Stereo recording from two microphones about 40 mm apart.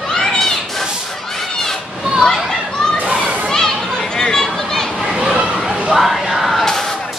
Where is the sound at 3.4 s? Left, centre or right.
Centre.